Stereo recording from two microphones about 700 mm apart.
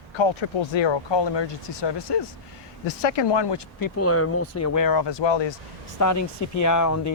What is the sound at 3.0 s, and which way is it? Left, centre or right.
Speech, left.